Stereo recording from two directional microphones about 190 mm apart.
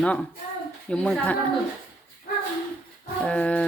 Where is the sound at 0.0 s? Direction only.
5° left (ahead or behind).